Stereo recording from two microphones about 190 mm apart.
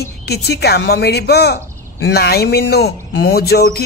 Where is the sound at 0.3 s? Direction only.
60° left (ahead or behind).